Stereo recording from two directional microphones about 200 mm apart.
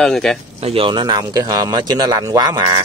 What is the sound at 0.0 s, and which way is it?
Speech, 5° left (ahead or behind).